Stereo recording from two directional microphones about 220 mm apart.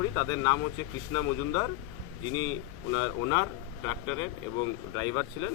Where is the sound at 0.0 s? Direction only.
15° left (ahead or behind).